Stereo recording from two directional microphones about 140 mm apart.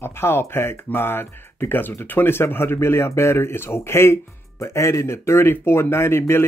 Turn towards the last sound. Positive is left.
turn(degrees=20)  # may be behind; listen again after turning